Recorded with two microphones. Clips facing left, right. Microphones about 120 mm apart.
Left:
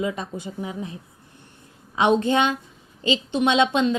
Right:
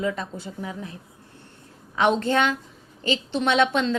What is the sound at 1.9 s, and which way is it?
A woman's voice, 15° left (ahead or behind).